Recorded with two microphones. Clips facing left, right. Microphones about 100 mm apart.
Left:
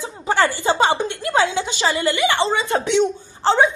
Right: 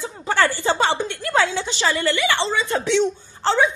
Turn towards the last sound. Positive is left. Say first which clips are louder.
# left 3 dB
turn(degrees=20)  # may be behind; listen again after turning